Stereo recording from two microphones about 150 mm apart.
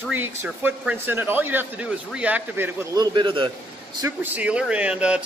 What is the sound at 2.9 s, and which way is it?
Speech, 30° right (ahead or behind).